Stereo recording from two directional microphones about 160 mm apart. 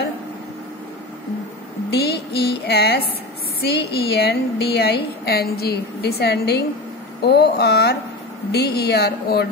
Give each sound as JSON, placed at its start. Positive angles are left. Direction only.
{"t": 1.9, "sound": "a sound", "side_deg": 90}
{"t": 3.6, "sound": "a woman's voice", "side_deg": 90}
{"t": 5.2, "sound": "a woman's voice", "side_deg": 75}